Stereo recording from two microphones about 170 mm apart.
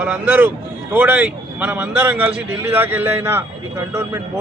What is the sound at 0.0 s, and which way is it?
A man's voice, 10° right (ahead or behind).